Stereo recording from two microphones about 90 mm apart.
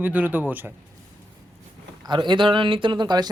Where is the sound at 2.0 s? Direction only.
60° right (ahead or behind).